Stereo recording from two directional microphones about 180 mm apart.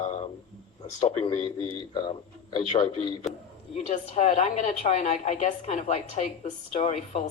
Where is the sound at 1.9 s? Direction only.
25° left (ahead or behind).